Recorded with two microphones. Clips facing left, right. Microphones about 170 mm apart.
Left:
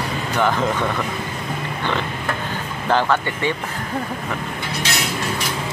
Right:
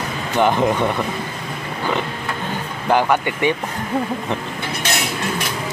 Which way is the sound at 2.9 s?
15° right (ahead or behind).